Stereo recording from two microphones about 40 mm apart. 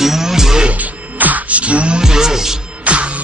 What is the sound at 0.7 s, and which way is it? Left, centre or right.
Music, right.